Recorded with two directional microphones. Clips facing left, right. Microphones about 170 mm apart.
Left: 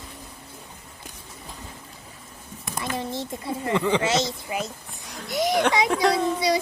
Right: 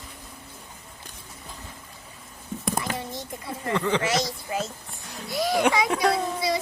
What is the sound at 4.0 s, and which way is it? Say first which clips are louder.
A child's voice: left 2 dB; 25° left (ahead or behind).